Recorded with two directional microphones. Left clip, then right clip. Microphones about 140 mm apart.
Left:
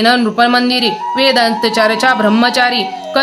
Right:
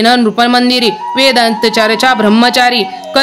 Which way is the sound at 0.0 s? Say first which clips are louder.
Right 2 dB; 50° right (ahead or behind).